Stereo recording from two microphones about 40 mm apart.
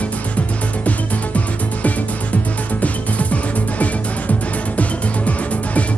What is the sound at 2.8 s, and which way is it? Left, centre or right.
Music, left.